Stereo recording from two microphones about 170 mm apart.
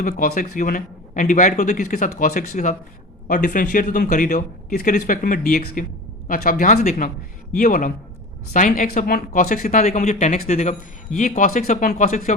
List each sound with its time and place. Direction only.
0.2 s speech: 50° left (ahead or behind)
9.6 s speech: 45° left (ahead or behind)